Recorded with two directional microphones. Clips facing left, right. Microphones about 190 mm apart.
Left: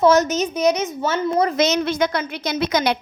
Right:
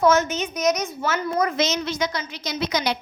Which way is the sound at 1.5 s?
55° left (ahead or behind).